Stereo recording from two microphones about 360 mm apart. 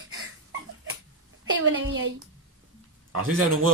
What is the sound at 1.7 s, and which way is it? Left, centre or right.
Speech, right.